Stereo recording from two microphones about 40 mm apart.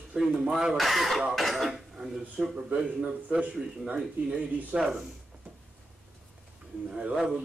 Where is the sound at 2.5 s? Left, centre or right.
Right.